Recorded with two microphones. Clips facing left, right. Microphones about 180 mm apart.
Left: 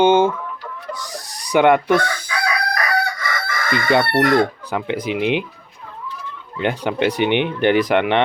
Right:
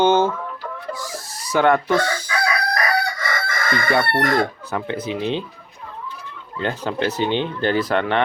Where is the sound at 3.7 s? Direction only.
20° left (ahead or behind).